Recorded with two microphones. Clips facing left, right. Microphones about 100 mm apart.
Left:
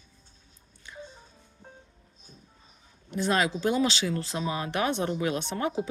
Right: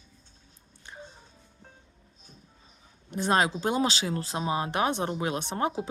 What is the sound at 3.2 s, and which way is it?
Speech, 30° right (ahead or behind).